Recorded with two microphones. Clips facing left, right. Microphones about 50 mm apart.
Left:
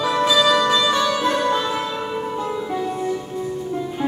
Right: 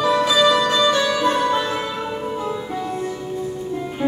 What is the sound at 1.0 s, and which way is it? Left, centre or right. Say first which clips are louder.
Music: right 1 dB; centre.